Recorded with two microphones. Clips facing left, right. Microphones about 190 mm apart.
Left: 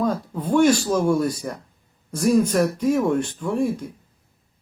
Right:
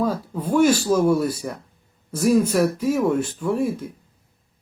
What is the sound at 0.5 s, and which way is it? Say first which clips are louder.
Speech: even; 5° right (ahead or behind).